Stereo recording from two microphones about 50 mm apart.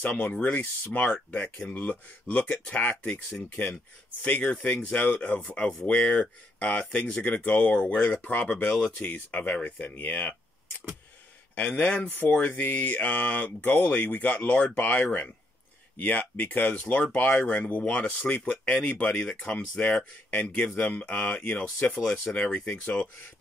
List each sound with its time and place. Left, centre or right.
0.0 s speech: left
1.9 s speech: left
4.2 s speech: left
8.1 s speech: left
11.5 s speech: left